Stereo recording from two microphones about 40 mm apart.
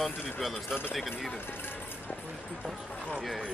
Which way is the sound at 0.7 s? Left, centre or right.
Centre.